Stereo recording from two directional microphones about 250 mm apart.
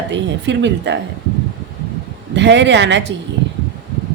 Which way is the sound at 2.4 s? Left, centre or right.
Right.